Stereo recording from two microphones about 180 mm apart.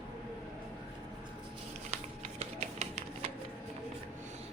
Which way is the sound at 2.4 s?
35° right (ahead or behind).